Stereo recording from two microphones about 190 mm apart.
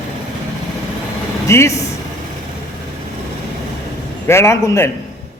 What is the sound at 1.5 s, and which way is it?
Speech, 15° left (ahead or behind).